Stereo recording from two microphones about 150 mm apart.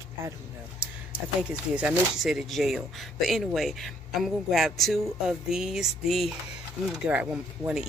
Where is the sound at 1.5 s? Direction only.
10° right (ahead or behind).